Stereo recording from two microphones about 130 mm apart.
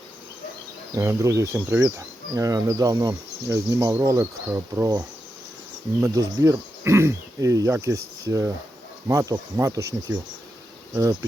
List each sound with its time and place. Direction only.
0.9 s speech: 25° right (ahead or behind)